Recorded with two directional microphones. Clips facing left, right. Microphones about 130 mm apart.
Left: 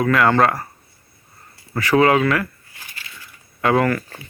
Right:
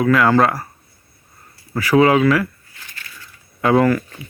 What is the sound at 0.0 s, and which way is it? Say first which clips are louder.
Speech: right 2 dB; 5° right (ahead or behind).